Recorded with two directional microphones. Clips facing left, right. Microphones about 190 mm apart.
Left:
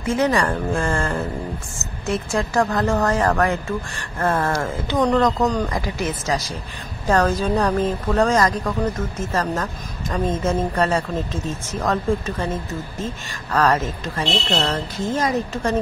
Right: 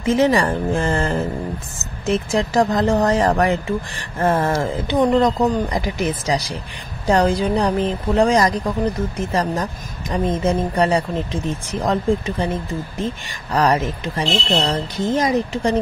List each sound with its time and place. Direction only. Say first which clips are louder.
0.0 s a woman's voice: right 3 dB; 20° right (ahead or behind)